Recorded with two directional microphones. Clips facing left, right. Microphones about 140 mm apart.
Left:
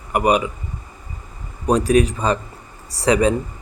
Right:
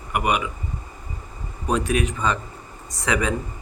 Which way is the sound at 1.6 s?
35° left (ahead or behind).